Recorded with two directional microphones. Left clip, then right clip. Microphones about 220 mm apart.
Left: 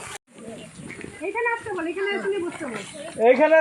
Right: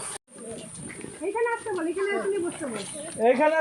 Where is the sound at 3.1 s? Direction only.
25° left (ahead or behind).